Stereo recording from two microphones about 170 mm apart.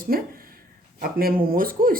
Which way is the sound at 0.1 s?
60° right (ahead or behind).